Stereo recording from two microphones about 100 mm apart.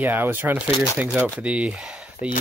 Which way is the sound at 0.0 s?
20° right (ahead or behind).